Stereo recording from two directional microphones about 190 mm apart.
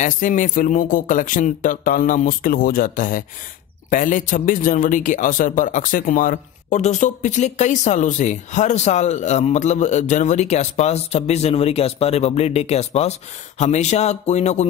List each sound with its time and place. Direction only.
0.0 s a man's voice: 40° left (ahead or behind)